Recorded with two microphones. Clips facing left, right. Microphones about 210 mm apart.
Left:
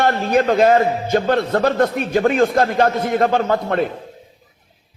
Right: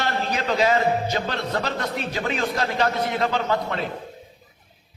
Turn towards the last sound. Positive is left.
turn(degrees=55)  # may be behind; listen again after turning